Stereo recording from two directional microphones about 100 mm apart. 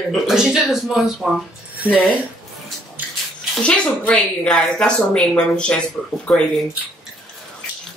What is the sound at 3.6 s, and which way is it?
A woman's voice, 10° left (ahead or behind).